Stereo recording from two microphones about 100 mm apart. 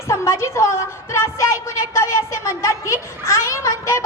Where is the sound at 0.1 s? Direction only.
30° left (ahead or behind).